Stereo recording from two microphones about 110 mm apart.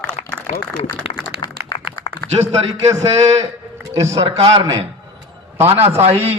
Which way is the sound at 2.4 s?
80° right.